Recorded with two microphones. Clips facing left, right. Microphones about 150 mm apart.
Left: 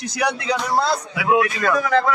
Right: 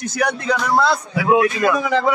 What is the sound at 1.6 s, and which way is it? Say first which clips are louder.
Speech: right 1 dB; 20° right (ahead or behind).